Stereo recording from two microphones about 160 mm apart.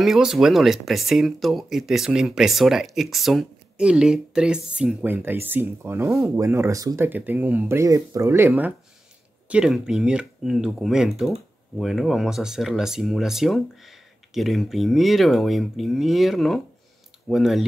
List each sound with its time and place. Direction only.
0.0 s speech: centre (ahead or behind); by 7.1 s 20° right (ahead or behind)
7.1 s speech: 10° right (ahead or behind)